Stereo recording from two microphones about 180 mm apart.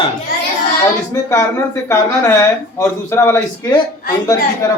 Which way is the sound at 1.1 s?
15° left (ahead or behind).